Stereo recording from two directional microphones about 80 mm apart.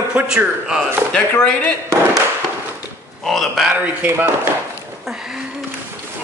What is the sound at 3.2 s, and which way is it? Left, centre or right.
Speech, centre.